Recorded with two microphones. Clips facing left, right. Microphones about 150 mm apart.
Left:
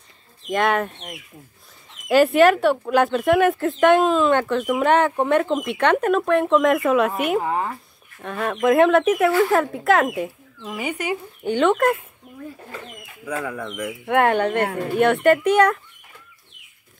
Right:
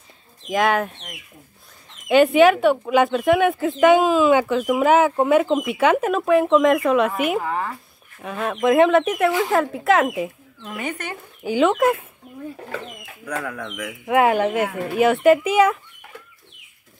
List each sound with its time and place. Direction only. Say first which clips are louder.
0.5 s speech: right 1 dB; centre (ahead or behind)
7.4 s speech: left 2 dB; 20° left (ahead or behind)
8.2 s speech: even; centre (ahead or behind)
11.4 s speech: right 1 dB; 5° right (ahead or behind)
13.2 s speech: left 1 dB; 5° left (ahead or behind)